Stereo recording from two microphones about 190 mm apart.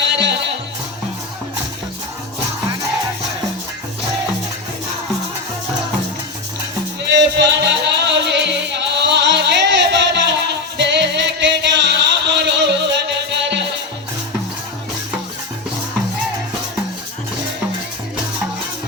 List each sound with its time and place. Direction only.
0.2 s music: 65° right (ahead or behind)
7.1 s music: 65° right (ahead or behind)